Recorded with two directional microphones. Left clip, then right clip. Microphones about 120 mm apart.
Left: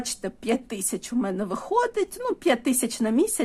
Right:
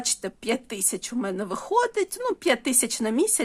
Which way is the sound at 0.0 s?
35° right (ahead or behind).